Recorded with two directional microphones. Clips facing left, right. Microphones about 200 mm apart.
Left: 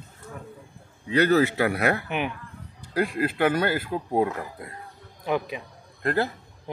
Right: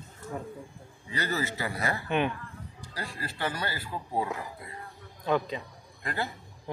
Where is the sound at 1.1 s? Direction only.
70° left (ahead or behind).